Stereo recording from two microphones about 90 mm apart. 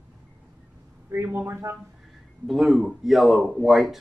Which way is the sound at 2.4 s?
Centre (ahead or behind).